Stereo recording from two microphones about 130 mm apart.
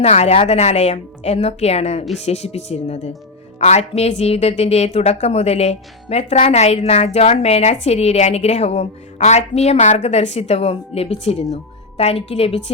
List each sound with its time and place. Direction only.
0.0 s a woman's voice: 55° left (ahead or behind)